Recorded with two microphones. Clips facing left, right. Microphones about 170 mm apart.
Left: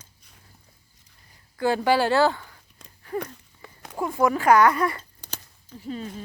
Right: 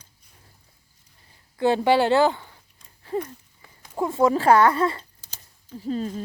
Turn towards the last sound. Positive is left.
turn(degrees=-35)  # may be behind; listen again after turning